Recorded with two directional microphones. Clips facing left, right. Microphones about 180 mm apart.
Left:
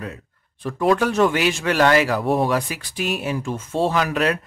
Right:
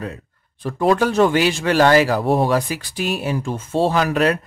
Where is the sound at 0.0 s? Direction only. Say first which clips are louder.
Right 3 dB; 35° right (ahead or behind).